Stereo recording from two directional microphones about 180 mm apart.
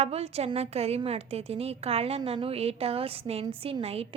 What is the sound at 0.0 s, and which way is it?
A woman's voice, 35° right (ahead or behind).